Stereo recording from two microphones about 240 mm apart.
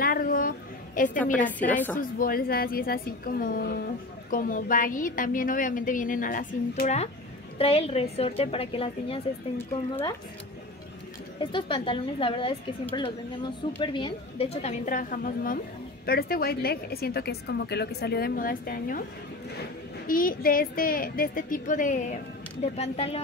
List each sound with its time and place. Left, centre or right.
0.0 s a sound: left
1.4 s a woman's voice: centre
2.0 s a woman's voice: left
9.6 s a woman's voice: centre
11.5 s a woman's voice: left
13.7 s a woman's voice: left
20.1 s a woman's voice: left